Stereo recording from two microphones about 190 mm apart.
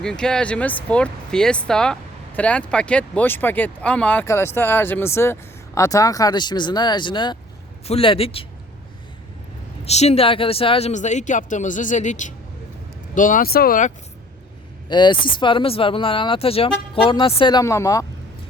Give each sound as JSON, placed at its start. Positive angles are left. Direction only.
{"t": 0.0, "sound": "speech", "side_deg": 5}
{"t": 9.8, "sound": "speech", "side_deg": 35}
{"t": 14.8, "sound": "speech", "side_deg": 25}